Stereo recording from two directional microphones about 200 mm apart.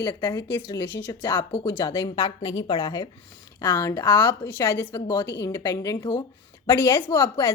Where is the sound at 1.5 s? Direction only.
30° left (ahead or behind).